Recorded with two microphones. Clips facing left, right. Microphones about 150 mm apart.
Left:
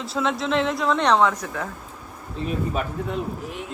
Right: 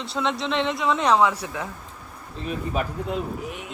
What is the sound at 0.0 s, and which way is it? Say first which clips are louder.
Speech: left 2 dB; centre (ahead or behind).